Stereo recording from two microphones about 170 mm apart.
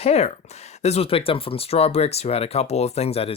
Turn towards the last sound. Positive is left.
turn(degrees=35)  # may be behind; listen again after turning